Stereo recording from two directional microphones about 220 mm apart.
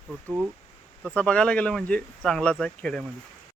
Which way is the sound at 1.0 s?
5° left (ahead or behind).